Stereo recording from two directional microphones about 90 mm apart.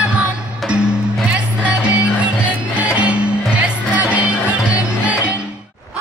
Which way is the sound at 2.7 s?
15° right (ahead or behind).